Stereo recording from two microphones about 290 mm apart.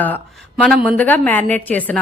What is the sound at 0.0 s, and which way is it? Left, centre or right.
A woman's voice, centre.